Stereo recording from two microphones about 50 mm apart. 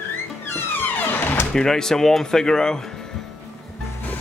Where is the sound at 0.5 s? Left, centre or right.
Left.